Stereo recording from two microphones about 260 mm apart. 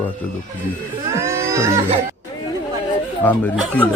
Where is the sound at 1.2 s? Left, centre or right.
Centre.